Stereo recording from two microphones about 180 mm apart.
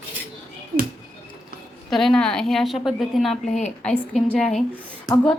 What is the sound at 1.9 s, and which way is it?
A woman's voice, centre (ahead or behind).